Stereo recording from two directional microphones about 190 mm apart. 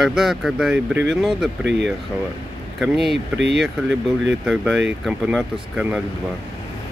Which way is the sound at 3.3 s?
65° right (ahead or behind).